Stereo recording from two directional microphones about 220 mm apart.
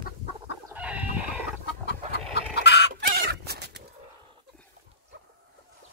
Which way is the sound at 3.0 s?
45° right (ahead or behind).